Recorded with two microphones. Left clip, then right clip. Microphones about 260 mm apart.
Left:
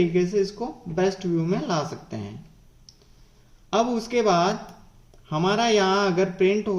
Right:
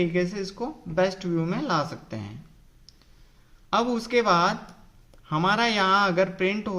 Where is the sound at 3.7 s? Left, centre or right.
Right.